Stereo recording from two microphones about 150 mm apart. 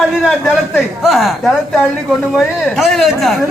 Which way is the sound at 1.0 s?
Centre (ahead or behind).